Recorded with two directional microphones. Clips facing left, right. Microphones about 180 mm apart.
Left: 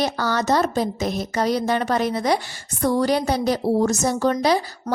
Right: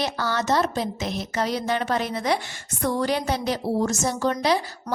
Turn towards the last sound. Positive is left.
turn(degrees=40)  # may be behind; listen again after turning